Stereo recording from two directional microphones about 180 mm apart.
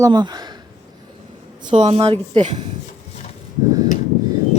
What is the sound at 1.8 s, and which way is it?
Speech, 30° right (ahead or behind).